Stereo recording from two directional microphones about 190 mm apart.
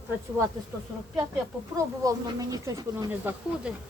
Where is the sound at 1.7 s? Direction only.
20° right (ahead or behind).